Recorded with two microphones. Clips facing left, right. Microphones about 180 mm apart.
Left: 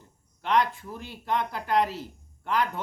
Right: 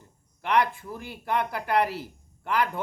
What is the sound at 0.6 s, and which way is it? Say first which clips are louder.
Speech: right 1 dB; 15° right (ahead or behind).